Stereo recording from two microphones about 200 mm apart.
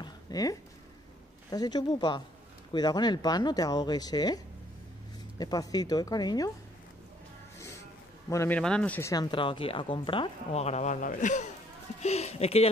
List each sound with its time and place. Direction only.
0.0 s a sound: 20° left (ahead or behind)
1.5 s a woman's voice: 20° left (ahead or behind)
5.4 s a woman's voice: 20° left (ahead or behind)
7.5 s a sound: 15° left (ahead or behind)
8.3 s speech: 10° left (ahead or behind)
9.1 s a woman's voice: 20° left (ahead or behind)